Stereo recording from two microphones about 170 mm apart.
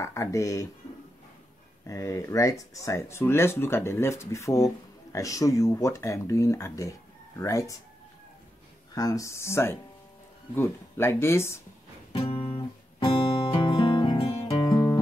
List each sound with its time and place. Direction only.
0.0 s speech: 20° left (ahead or behind)
1.9 s speech: 15° left (ahead or behind)
8.9 s speech: 20° left (ahead or behind)
12.1 s guitar: 35° left (ahead or behind)